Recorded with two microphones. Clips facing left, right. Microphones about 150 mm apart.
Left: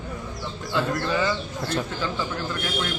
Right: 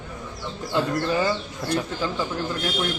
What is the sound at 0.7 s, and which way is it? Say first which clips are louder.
Speech: right 1 dB; 40° right (ahead or behind).